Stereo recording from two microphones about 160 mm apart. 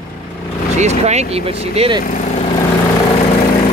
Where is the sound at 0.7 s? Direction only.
45° right (ahead or behind).